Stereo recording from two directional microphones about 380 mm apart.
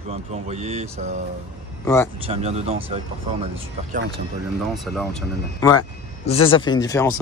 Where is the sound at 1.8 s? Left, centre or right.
Centre.